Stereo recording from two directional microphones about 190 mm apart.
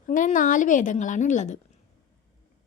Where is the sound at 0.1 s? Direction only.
45° left (ahead or behind).